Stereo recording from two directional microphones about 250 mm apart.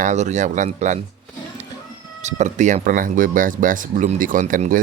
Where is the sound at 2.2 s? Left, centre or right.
Right.